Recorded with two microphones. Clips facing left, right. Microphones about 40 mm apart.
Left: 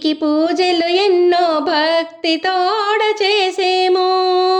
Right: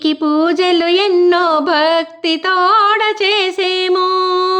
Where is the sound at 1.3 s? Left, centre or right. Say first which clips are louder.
Right 2 dB; centre; by 3.9 s right.